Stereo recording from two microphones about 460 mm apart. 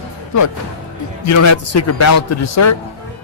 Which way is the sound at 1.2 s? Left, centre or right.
Left.